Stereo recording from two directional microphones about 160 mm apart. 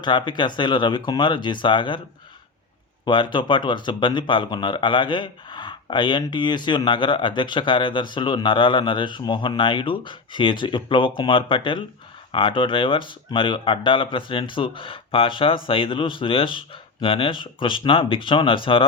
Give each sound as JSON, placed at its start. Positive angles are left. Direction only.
{"t": 0.0, "sound": "speech", "side_deg": 30}
{"t": 3.0, "sound": "speech", "side_deg": 30}